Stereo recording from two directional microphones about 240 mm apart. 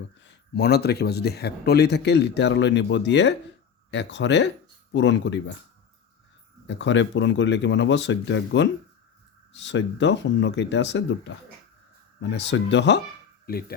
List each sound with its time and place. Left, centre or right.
0.3 s speech: left
6.7 s speech: left